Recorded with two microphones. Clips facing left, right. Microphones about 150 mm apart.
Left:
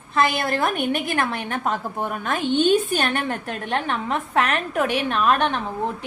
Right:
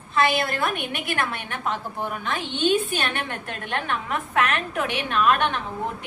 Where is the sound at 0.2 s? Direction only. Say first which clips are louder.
Left 1 dB; 45° left (ahead or behind).